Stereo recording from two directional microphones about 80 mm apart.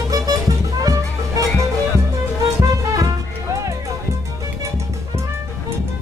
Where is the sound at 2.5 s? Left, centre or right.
Right.